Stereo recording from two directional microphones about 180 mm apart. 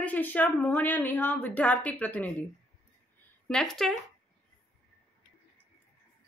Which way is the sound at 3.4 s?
5° left (ahead or behind).